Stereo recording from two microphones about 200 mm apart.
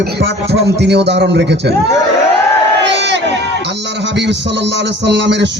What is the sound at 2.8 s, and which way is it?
Crowd, 60° right (ahead or behind).